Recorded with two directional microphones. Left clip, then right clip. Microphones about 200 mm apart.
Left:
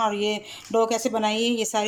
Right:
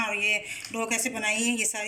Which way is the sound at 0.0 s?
45° left (ahead or behind).